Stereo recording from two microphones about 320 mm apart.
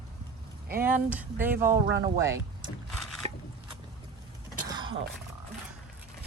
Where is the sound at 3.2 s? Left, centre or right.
Centre.